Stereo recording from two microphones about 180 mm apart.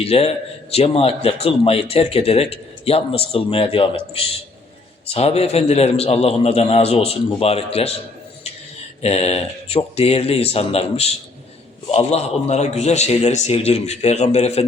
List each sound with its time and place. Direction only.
0.0 s a man's voice: 35° left (ahead or behind)
9.0 s a man's voice: 35° left (ahead or behind)